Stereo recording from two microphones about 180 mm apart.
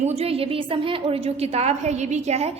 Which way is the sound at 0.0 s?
35° right (ahead or behind).